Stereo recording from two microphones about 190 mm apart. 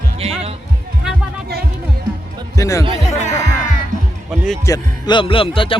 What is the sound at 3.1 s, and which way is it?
Music, 35° left (ahead or behind).